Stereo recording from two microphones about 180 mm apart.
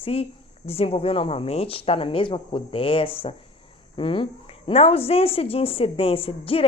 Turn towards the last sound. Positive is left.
turn(degrees=30)  # may be behind; listen again after turning